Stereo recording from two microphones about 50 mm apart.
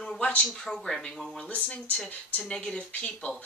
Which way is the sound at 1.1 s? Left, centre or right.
Centre.